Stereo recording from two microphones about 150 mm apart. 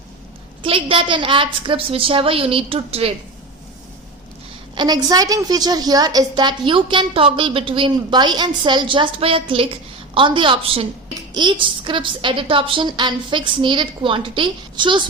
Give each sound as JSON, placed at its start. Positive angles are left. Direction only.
{"t": 0.6, "sound": "a woman's voice", "side_deg": -35}
{"t": 4.7, "sound": "a woman's voice", "side_deg": -30}